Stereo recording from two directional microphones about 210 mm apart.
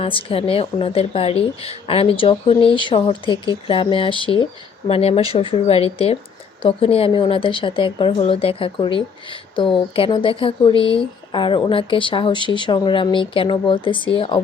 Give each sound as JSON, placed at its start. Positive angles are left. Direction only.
{"t": 0.0, "sound": "speech", "side_deg": 25}